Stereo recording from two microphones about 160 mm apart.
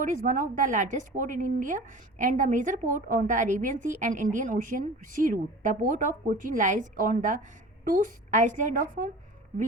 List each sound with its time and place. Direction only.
0.0 s a woman's voice: 55° right (ahead or behind)